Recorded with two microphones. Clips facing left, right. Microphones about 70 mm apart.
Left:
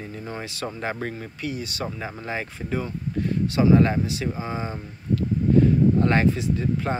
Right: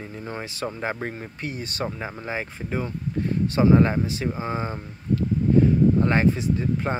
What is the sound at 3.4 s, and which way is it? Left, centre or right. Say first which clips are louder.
Speech: even; right.